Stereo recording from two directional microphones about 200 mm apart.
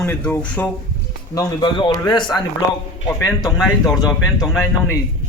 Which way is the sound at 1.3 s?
25° left (ahead or behind).